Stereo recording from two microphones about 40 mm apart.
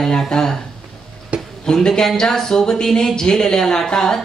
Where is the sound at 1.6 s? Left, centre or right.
Centre.